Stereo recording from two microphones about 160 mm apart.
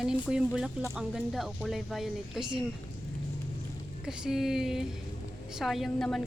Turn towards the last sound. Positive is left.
turn(degrees=5)  # may be behind; listen again after turning